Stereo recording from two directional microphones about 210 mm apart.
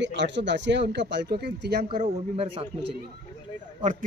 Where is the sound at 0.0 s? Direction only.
55° right (ahead or behind).